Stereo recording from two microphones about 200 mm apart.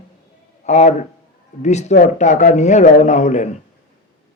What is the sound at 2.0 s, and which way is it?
A man's voice, 35° left (ahead or behind).